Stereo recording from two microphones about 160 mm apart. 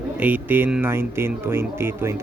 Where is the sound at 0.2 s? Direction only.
10° right (ahead or behind).